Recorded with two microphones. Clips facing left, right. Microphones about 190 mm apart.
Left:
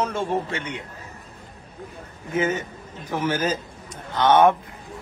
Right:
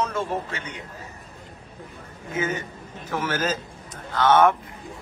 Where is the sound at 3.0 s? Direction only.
15° left (ahead or behind).